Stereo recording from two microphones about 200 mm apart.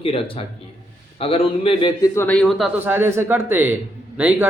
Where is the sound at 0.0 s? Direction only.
25° left (ahead or behind).